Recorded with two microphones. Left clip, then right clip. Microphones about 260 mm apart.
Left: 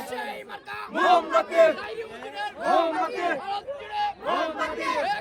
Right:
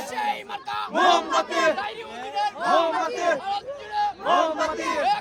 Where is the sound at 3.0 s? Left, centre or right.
Centre.